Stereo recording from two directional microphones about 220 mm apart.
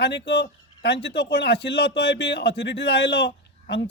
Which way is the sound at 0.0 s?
50° left (ahead or behind).